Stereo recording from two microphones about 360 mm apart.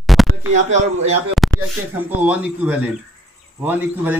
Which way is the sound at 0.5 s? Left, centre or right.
Centre.